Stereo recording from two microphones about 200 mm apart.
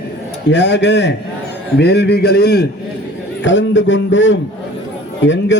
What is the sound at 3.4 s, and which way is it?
A man's voice, 65° left (ahead or behind).